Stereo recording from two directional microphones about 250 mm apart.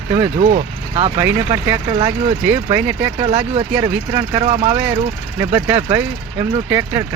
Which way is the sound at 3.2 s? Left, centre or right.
Right.